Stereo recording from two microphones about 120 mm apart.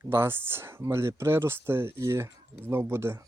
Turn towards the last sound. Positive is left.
turn(degrees=-20)  # may be behind; listen again after turning